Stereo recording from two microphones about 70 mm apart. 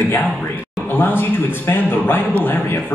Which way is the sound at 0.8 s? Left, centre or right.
Left.